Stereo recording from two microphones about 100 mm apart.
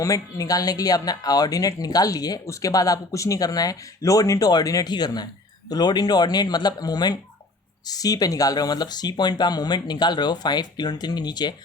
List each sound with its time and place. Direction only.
0.0 s speech: 35° left (ahead or behind)